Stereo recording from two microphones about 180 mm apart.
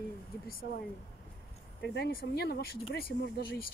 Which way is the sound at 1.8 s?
65° left (ahead or behind).